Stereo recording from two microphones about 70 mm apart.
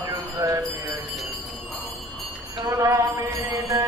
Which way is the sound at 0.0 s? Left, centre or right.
Right.